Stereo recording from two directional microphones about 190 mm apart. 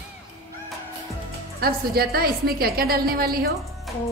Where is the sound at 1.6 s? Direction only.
55° right (ahead or behind).